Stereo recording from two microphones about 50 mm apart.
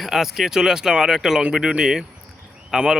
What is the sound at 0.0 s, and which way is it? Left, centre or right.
Speech, centre.